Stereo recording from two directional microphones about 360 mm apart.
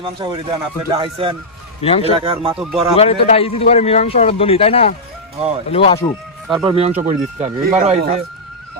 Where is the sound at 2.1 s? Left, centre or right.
Centre.